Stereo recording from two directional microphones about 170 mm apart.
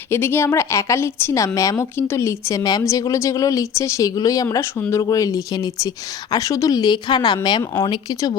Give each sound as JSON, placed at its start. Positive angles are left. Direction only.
{"t": 0.1, "sound": "a woman's voice", "side_deg": 15}